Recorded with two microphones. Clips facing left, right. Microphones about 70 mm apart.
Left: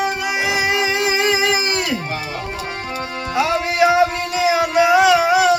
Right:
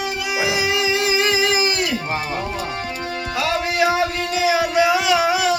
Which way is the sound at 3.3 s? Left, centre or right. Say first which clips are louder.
Left 3 dB; left.